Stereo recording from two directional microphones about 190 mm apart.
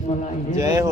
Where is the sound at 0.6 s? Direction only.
15° right (ahead or behind).